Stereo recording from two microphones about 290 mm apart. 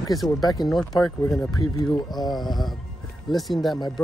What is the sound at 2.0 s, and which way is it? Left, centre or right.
Speech, centre.